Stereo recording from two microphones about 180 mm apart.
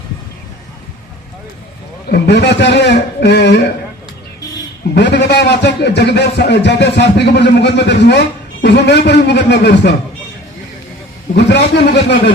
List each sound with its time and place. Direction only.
2.0 s a man's voice: 65° left (ahead or behind)
4.9 s a man's voice: 70° left (ahead or behind)
11.3 s a man's voice: 70° left (ahead or behind)